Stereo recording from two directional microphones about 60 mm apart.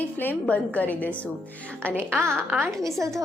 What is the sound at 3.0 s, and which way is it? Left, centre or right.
Speech, right.